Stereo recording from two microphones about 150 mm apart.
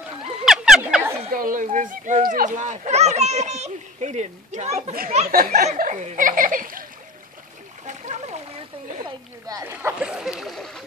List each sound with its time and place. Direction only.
0.5 s frog: 5° right (ahead or behind)
1.3 s speech: 65° right (ahead or behind)
7.8 s splash: 55° right (ahead or behind)
9.5 s speech: 20° right (ahead or behind); by 10.8 s centre (ahead or behind)